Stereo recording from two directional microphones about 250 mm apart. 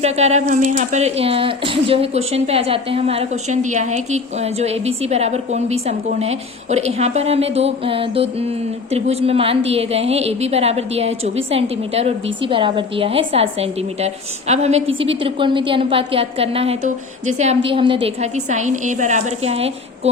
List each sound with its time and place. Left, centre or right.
0.0 s speech: right